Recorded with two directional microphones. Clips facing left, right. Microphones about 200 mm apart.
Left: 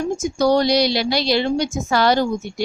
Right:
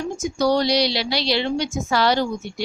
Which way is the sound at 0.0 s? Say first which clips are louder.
Left 3 dB; 50° left (ahead or behind).